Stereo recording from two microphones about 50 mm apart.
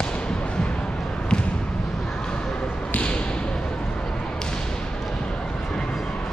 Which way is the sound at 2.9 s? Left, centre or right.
Left.